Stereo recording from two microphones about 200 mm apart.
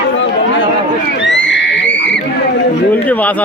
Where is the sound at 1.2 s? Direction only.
60° left (ahead or behind).